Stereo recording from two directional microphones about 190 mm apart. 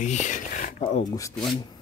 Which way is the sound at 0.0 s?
40° left (ahead or behind).